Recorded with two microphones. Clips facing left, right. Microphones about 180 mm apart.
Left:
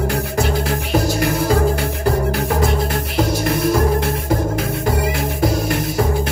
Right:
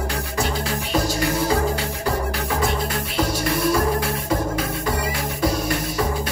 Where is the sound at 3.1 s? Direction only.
50° left (ahead or behind).